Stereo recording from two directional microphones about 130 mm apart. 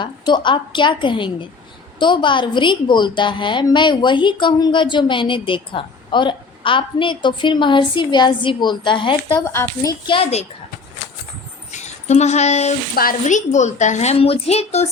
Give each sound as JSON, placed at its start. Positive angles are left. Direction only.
{"t": 0.0, "sound": "a woman's voice", "side_deg": 35}
{"t": 9.4, "sound": "speech", "side_deg": 20}
{"t": 10.1, "sound": "a child's voice", "side_deg": 45}
{"t": 11.7, "sound": "a woman's voice", "side_deg": 60}